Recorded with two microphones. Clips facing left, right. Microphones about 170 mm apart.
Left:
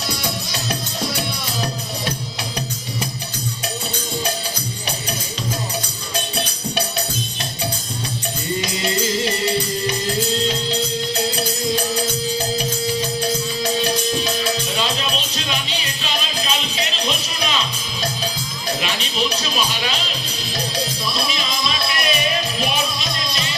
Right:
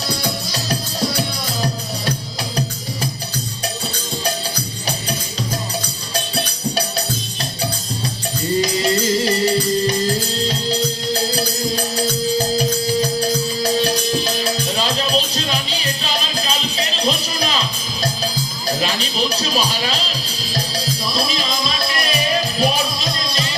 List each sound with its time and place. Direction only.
8.8 s music: 35° right (ahead or behind)
14.8 s music: 35° right (ahead or behind)
18.8 s music: 35° right (ahead or behind)
21.1 s music: 35° right (ahead or behind)